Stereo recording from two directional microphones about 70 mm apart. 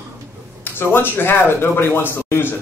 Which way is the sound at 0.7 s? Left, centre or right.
Left.